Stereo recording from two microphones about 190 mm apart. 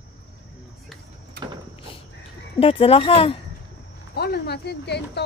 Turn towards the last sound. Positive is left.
turn(degrees=60)  # may be behind; listen again after turning